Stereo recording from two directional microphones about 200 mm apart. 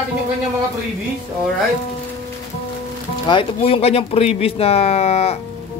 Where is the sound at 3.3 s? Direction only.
25° left (ahead or behind).